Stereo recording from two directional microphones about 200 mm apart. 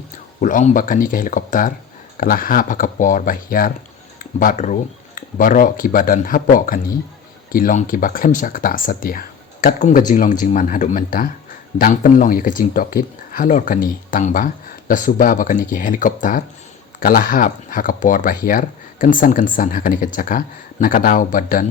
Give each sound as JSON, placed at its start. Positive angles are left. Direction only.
{"t": 0.4, "sound": "speech", "side_deg": 40}